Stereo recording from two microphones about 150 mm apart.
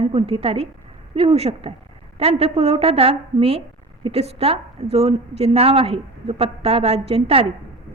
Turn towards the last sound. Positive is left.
turn(degrees=-40)  # may be behind; listen again after turning